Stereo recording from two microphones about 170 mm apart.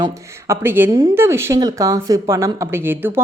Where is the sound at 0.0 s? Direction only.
15° right (ahead or behind).